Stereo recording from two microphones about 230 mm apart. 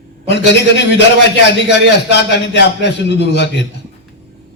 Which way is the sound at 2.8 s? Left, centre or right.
Left.